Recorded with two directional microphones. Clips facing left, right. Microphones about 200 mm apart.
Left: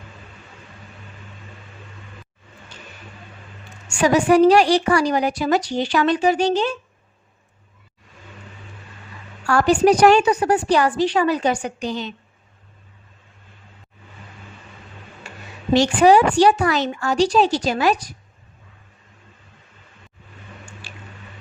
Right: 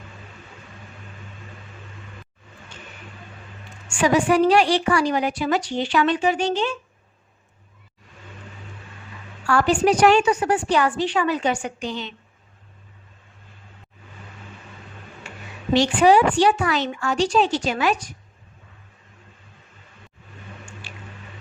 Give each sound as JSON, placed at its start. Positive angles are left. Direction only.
{"t": 3.8, "sound": "a woman's voice", "side_deg": 40}
{"t": 9.5, "sound": "a woman's voice", "side_deg": 40}
{"t": 15.7, "sound": "a woman's voice", "side_deg": 45}